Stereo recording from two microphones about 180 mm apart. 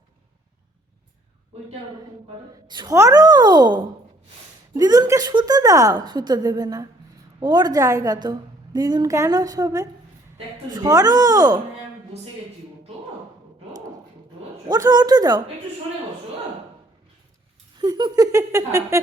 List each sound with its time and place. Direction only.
2.6 s a woman's voice: 25° right (ahead or behind)
14.7 s a woman's voice: 20° right (ahead or behind)
17.7 s a woman's voice: 25° right (ahead or behind)